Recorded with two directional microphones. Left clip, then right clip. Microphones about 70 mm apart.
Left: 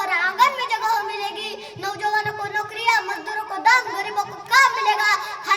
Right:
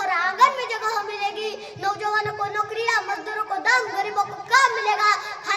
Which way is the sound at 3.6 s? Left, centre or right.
Right.